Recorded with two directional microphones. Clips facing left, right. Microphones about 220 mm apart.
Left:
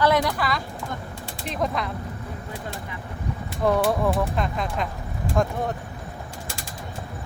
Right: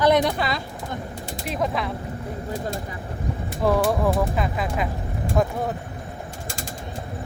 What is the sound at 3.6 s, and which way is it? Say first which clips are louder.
Speech: right 1 dB; centre (ahead or behind).